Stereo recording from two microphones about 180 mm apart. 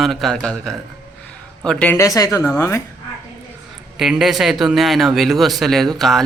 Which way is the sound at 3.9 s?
Centre (ahead or behind).